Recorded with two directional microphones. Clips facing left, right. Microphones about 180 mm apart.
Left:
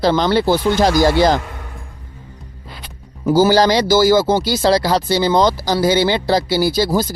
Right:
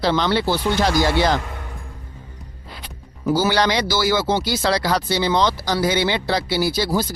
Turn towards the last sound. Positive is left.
turn(degrees=40)  # may be behind; listen again after turning